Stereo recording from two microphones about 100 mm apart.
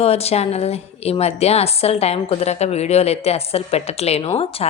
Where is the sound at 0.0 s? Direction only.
90° left.